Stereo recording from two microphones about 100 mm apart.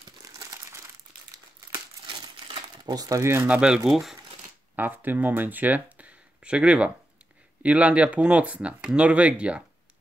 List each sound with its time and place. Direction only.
0.2 s crumpling: 35° right (ahead or behind)
1.7 s crumpling: 50° right (ahead or behind); by 3.4 s 25° right (ahead or behind)
3.4 s speech: 10° right (ahead or behind)
4.7 s speech: 20° right (ahead or behind)